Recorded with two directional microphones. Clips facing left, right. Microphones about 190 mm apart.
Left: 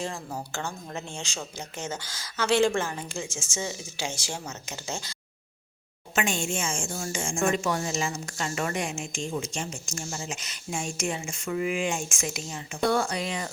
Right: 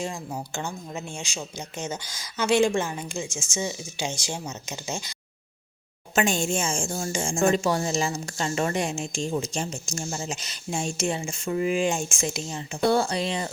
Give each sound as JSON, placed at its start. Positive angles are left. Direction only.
{"t": 0.0, "sound": "speech", "side_deg": -15}
{"t": 6.1, "sound": "speech", "side_deg": -40}